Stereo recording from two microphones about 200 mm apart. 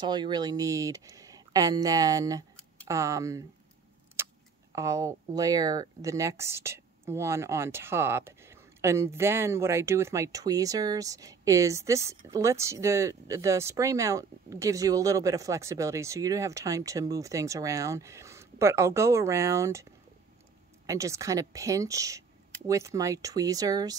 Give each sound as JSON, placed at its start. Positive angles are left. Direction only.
{"t": 0.0, "sound": "speech", "side_deg": -20}
{"t": 4.2, "sound": "tick-tock", "side_deg": -10}
{"t": 4.7, "sound": "speech", "side_deg": -15}